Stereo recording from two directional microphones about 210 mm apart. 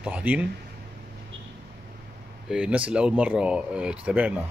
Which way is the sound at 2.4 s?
5° right (ahead or behind).